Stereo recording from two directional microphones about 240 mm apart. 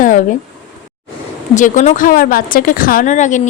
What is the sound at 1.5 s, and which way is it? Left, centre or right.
A woman's voice, left.